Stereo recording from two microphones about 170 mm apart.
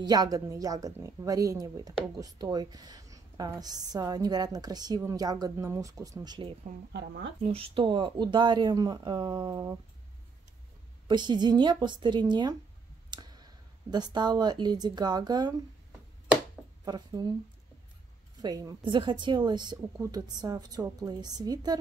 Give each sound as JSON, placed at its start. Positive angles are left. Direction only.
{"t": 0.0, "sound": "a woman's voice", "side_deg": -20}
{"t": 6.9, "sound": "speech", "side_deg": -85}
{"t": 7.4, "sound": "a woman's voice", "side_deg": -35}
{"t": 11.1, "sound": "a woman's voice", "side_deg": -25}
{"t": 16.8, "sound": "speech", "side_deg": -25}
{"t": 18.4, "sound": "a woman's voice", "side_deg": -25}